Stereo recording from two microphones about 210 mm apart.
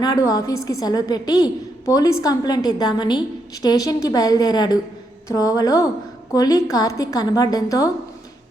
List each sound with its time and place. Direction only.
0.0 s a woman's voice: 20° left (ahead or behind)